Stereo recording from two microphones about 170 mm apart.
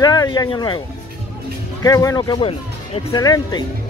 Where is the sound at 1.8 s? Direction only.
20° left (ahead or behind).